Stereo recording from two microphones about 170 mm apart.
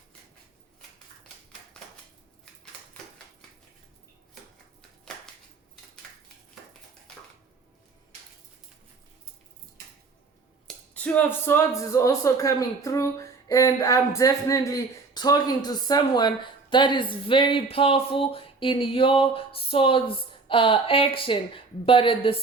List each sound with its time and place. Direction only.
1.7 s dishes: 5° left (ahead or behind)
10.7 s speech: 10° left (ahead or behind); by 22.4 s 30° left (ahead or behind)